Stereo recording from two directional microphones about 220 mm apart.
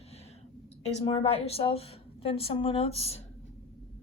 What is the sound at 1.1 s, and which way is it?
A woman's voice, 25° left (ahead or behind).